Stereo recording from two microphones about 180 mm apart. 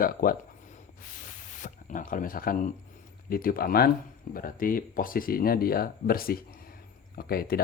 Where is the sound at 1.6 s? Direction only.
45° left (ahead or behind).